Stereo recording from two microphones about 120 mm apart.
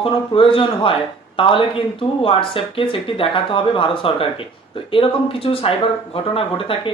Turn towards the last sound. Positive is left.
turn(degrees=50)  # may be behind; listen again after turning